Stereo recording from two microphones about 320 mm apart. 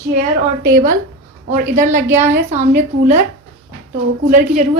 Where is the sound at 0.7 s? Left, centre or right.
Right.